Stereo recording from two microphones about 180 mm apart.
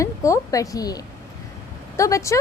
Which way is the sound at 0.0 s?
15° left (ahead or behind).